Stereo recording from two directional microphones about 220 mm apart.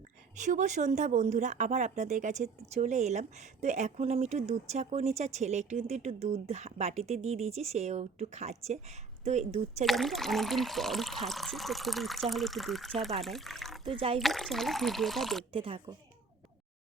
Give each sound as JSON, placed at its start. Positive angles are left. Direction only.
{"t": 0.4, "sound": "speech", "side_deg": -35}
{"t": 9.8, "sound": "speech", "side_deg": 0}
{"t": 13.8, "sound": "speech", "side_deg": -25}
{"t": 14.2, "sound": "speech", "side_deg": 0}
{"t": 15.5, "sound": "speech", "side_deg": -25}